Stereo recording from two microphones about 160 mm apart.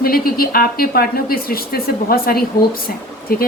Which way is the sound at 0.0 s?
65° left (ahead or behind).